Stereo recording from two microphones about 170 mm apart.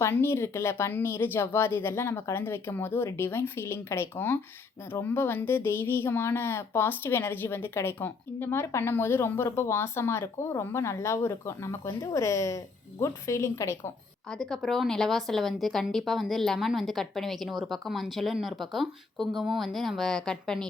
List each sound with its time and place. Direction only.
0.0 s speech: 15° left (ahead or behind)
14.3 s speech: 5° left (ahead or behind)